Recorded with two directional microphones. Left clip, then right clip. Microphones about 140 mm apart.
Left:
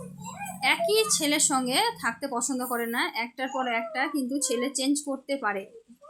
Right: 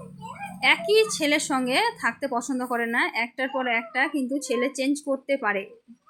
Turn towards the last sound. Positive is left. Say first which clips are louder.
# right 4 dB
turn(degrees=-15)  # may be behind; listen again after turning